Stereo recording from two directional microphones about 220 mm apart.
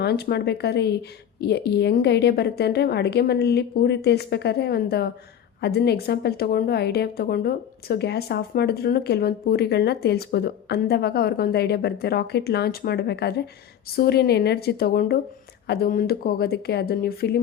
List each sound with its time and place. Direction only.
0.0 s a woman's voice: 45° left (ahead or behind)